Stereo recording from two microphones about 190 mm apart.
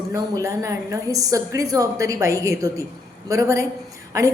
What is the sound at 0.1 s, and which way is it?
A woman's voice, 15° right (ahead or behind).